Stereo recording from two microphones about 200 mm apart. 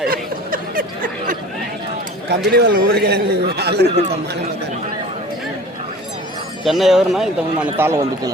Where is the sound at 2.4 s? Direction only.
55° right (ahead or behind).